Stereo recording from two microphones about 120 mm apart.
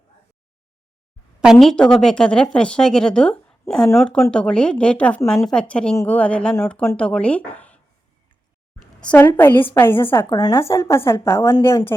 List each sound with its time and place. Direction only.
1.4 s a woman's voice: centre (ahead or behind)
8.8 s a woman's voice: 10° left (ahead or behind)
10.2 s speech: 30° left (ahead or behind)